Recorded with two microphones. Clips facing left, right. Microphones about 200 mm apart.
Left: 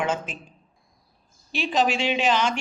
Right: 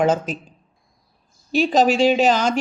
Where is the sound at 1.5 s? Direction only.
40° right (ahead or behind).